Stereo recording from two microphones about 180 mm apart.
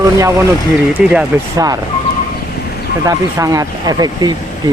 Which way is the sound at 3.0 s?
20° right (ahead or behind).